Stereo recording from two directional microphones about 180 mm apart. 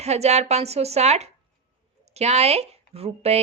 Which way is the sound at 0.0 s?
35° right (ahead or behind).